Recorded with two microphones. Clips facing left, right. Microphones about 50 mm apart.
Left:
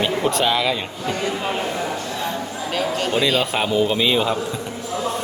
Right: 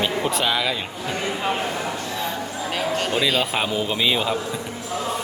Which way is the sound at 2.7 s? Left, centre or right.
Centre.